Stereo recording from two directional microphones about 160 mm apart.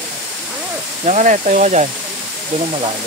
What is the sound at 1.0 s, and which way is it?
Speech, 45° right (ahead or behind).